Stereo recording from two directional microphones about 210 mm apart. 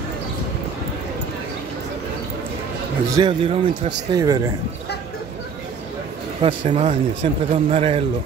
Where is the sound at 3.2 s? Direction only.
25° right (ahead or behind).